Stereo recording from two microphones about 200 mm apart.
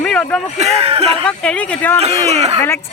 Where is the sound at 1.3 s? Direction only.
5° left (ahead or behind).